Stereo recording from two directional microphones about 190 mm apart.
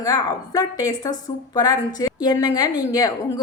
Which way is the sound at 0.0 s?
20° left (ahead or behind).